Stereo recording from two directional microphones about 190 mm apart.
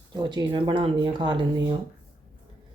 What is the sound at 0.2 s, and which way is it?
Speech, 20° right (ahead or behind).